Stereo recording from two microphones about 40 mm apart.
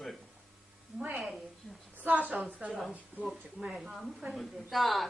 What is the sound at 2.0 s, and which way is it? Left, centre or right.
Speech, right.